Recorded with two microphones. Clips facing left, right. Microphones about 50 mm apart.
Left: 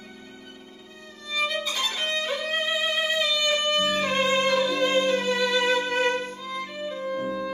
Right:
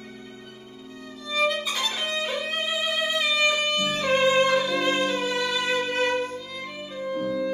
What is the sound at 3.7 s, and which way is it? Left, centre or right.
Music, left.